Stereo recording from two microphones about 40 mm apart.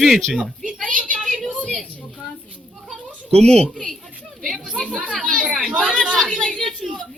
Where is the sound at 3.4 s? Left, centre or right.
Centre.